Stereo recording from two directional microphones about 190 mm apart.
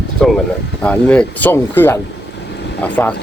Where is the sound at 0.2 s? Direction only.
Centre (ahead or behind).